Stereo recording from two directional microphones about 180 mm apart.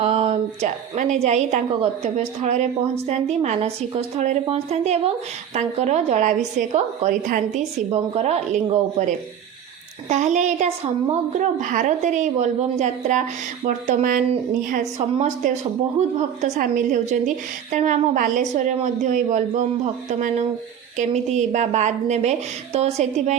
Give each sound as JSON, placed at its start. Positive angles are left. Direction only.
{"t": 0.0, "sound": "a woman's voice", "side_deg": -35}
{"t": 10.1, "sound": "a woman's voice", "side_deg": -40}